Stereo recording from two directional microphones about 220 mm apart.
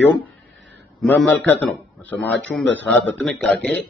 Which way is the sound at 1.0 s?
5° left (ahead or behind).